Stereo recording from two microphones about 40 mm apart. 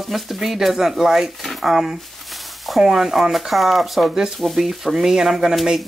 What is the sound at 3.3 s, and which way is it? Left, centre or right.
Speech, centre.